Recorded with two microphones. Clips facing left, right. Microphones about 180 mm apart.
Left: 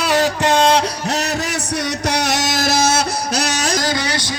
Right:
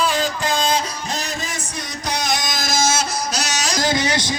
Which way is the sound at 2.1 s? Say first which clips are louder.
Left 2 dB; 70° left (ahead or behind).